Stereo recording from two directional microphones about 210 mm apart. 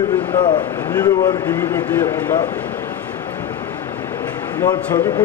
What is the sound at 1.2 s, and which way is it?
Speech, 10° left (ahead or behind).